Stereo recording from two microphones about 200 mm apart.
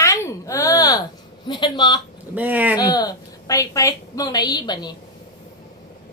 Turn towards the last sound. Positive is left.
turn(degrees=20)  # may be behind; listen again after turning